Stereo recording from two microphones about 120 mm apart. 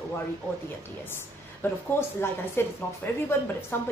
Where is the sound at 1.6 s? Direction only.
20° left (ahead or behind).